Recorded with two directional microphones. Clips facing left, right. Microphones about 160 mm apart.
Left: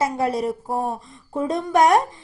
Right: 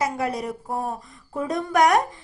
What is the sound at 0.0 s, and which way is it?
A woman's voice, 30° left (ahead or behind).